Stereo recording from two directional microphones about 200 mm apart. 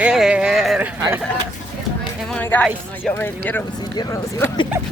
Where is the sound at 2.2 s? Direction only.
5° left (ahead or behind).